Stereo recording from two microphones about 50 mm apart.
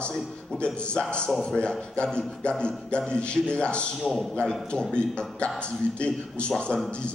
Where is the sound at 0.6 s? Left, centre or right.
Left.